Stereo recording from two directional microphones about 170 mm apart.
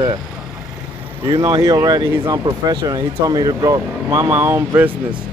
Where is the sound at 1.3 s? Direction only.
25° right (ahead or behind).